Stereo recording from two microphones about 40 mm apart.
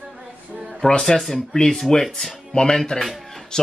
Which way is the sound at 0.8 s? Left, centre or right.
Centre.